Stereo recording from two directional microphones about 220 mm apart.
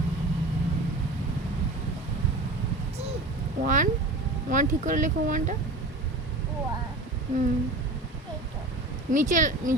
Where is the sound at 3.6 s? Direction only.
35° right (ahead or behind).